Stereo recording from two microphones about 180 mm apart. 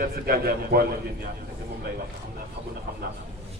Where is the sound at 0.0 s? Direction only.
60° right (ahead or behind).